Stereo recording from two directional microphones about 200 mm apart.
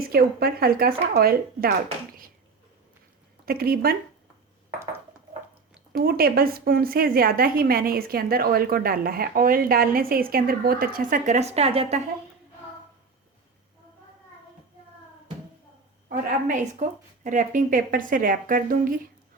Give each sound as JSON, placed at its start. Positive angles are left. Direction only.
{"t": 0.1, "sound": "a woman's voice", "side_deg": -50}
{"t": 3.4, "sound": "a woman's voice", "side_deg": -50}
{"t": 6.0, "sound": "a woman's voice", "side_deg": -50}
{"t": 16.0, "sound": "a woman's voice", "side_deg": -40}